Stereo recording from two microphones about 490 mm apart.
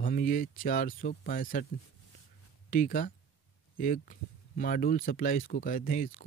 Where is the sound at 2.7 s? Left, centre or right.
Centre.